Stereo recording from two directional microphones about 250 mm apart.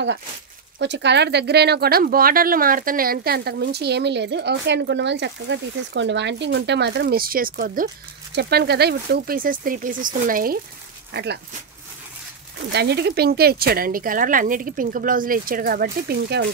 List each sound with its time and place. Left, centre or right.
0.7 s speech: right
12.7 s speech: right